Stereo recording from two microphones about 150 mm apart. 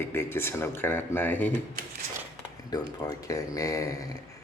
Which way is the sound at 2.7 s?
25° left (ahead or behind).